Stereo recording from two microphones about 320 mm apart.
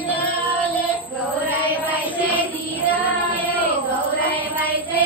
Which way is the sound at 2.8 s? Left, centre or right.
Centre.